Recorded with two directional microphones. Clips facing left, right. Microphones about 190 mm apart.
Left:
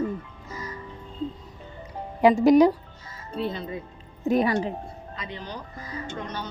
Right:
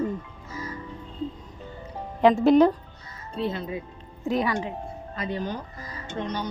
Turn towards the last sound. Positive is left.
turn(degrees=-15)  # may be behind; listen again after turning